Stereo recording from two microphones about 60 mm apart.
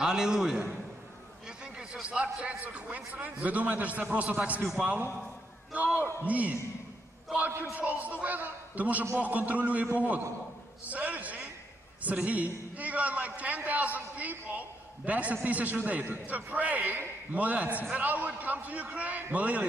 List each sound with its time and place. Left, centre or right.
0.0 s a man's voice: centre
2.0 s a man's voice: right
5.7 s a man's voice: right
7.7 s a man's voice: right